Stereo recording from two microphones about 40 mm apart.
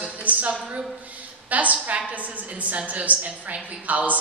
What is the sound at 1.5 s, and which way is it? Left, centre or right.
A man's voice, right.